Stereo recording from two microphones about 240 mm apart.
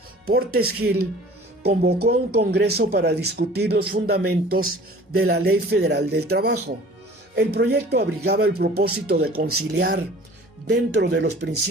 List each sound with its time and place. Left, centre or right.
0.3 s speech: right